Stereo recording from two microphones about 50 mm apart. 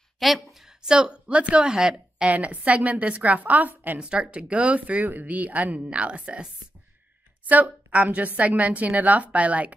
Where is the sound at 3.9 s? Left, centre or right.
Right.